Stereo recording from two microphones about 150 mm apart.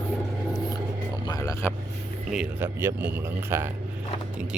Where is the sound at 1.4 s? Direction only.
15° left (ahead or behind).